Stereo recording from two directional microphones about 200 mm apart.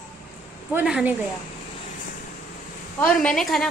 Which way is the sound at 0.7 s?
5° right (ahead or behind).